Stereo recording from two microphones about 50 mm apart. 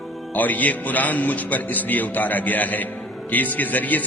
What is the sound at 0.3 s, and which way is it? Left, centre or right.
Speech, left.